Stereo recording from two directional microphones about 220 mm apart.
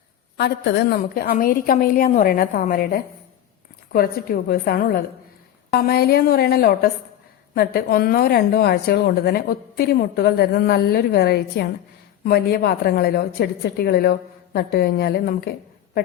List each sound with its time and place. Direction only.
0.3 s a woman's voice: 50° left (ahead or behind)